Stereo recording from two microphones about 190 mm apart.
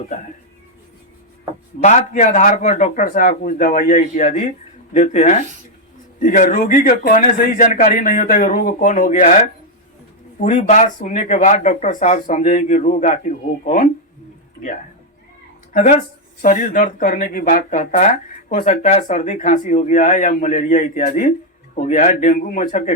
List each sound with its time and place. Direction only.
1.8 s speech: 40° left (ahead or behind)
15.7 s speech: 40° left (ahead or behind)